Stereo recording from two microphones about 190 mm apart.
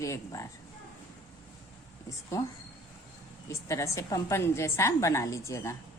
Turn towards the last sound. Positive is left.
turn(degrees=15)  # may be behind; listen again after turning